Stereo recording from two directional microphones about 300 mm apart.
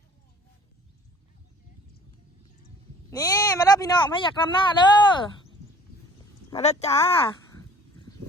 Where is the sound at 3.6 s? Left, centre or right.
Centre.